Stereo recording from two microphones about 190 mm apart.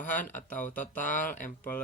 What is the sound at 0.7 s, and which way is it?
Speech, 40° left (ahead or behind).